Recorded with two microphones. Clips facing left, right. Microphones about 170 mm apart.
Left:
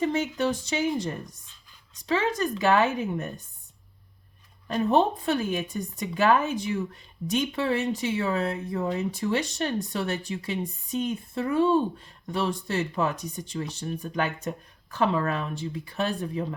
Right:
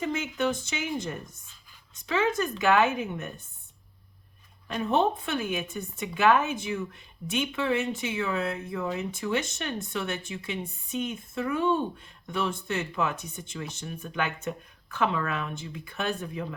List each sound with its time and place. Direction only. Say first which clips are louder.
0.1 s speech: left 2 dB; 35° left (ahead or behind)
4.7 s speech: left 3 dB; 35° left (ahead or behind)